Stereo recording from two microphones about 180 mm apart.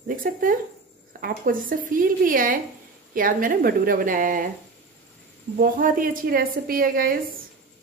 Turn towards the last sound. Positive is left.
turn(degrees=-55)  # may be behind; listen again after turning